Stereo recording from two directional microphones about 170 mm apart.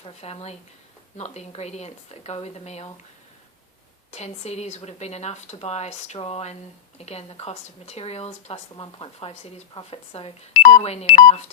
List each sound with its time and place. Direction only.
0.0 s speech: 35° left (ahead or behind)
4.1 s speech: 40° left (ahead or behind)